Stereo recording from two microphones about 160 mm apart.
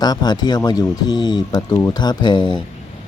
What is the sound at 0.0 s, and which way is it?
Speech, 25° left (ahead or behind).